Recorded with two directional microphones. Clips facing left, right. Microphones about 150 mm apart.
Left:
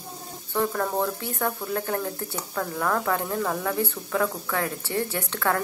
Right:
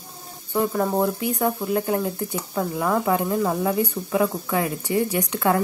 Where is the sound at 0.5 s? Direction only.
15° right (ahead or behind).